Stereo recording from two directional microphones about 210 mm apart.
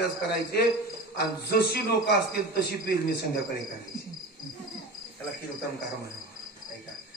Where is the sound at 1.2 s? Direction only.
50° left (ahead or behind).